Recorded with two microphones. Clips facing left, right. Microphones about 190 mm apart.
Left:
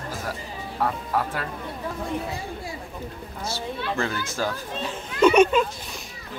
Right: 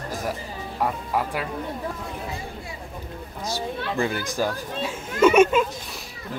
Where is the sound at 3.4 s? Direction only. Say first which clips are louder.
Right 1 dB; 15° right (ahead or behind).